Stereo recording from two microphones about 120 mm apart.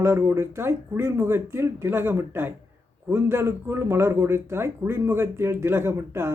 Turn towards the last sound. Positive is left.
turn(degrees=-20)  # may be behind; listen again after turning